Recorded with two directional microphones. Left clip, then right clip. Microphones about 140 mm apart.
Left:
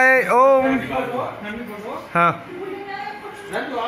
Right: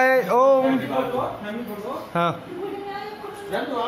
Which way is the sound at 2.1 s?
5° left (ahead or behind).